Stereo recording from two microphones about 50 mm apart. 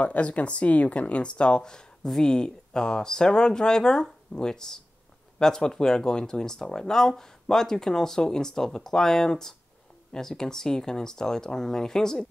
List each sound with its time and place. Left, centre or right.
0.0 s speech: left; by 12.3 s centre